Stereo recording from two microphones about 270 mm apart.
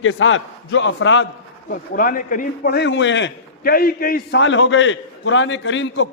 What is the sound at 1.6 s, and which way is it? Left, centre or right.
A man's voice, left.